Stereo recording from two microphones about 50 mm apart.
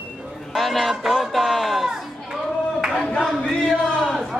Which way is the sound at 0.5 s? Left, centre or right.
Centre.